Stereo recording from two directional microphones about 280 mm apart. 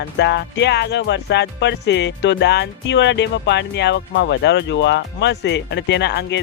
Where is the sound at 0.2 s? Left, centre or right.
Left.